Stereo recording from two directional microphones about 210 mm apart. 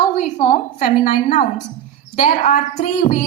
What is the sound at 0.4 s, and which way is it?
A woman's voice, 35° left (ahead or behind).